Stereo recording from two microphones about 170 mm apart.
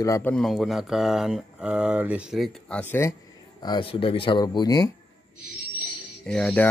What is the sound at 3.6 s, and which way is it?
Speech, 30° left (ahead or behind).